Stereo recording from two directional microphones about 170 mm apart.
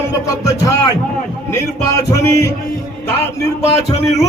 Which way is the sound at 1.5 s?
20° left (ahead or behind).